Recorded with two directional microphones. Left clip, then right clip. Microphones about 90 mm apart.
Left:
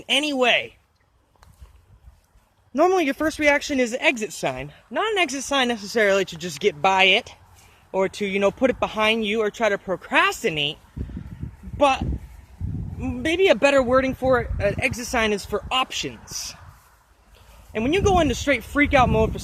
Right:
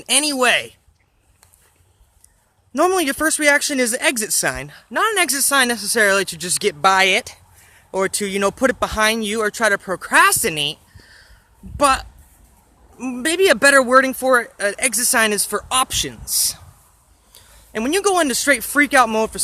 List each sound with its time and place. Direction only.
0.0 s speech: 25° right (ahead or behind)
2.7 s speech: 20° right (ahead or behind)
5.2 s speech: 20° right (ahead or behind)
11.8 s speech: 45° right (ahead or behind)
16.2 s speech: 20° right (ahead or behind)
17.7 s speech: 30° right (ahead or behind)